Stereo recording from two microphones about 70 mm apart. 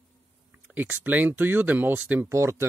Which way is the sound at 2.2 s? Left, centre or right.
Right.